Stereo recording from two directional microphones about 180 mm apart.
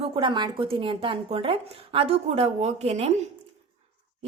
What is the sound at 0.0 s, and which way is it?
Speech, 25° right (ahead or behind).